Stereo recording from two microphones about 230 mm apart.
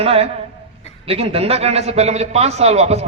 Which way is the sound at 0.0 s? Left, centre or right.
Right.